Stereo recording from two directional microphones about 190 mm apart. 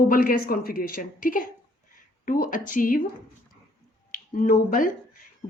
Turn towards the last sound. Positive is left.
turn(degrees=45)  # may be behind; listen again after turning